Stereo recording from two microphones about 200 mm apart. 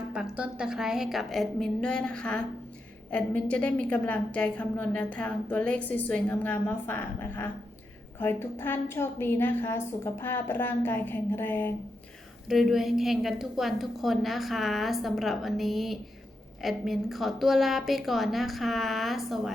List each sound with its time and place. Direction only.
0.1 s a woman's voice: 5° right (ahead or behind)
12.5 s a woman's voice: centre (ahead or behind)